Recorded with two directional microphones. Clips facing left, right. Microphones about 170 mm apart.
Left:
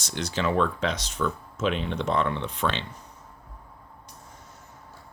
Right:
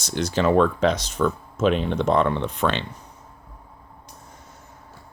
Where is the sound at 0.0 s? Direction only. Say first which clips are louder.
Right 6 dB; 40° right (ahead or behind).